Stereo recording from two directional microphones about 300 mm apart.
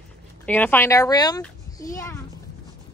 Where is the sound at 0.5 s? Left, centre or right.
Centre.